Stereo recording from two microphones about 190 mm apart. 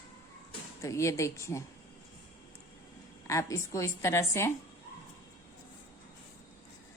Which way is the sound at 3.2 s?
15° left (ahead or behind).